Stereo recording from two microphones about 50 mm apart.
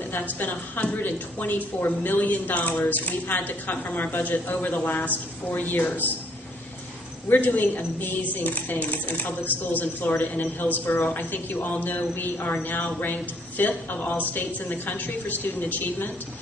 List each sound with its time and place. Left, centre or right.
0.1 s a woman's voice: left
7.2 s a woman's voice: left